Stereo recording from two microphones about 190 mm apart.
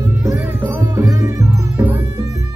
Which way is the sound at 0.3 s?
10° right (ahead or behind).